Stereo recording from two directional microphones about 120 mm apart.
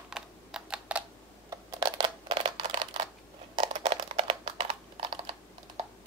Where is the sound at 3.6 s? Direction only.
55° right (ahead or behind).